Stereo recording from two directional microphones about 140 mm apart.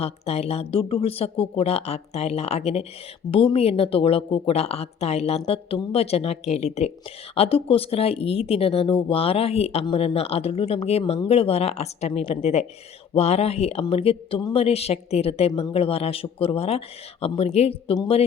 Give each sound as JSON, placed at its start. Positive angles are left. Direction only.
{"t": 0.0, "sound": "speech", "side_deg": 45}